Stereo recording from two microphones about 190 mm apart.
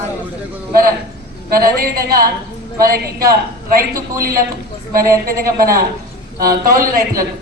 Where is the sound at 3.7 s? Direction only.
50° right (ahead or behind).